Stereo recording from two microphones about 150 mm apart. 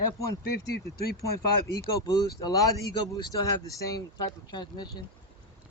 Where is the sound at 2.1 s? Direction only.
25° left (ahead or behind).